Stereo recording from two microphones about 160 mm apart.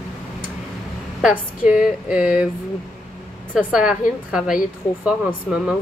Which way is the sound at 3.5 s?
5° right (ahead or behind).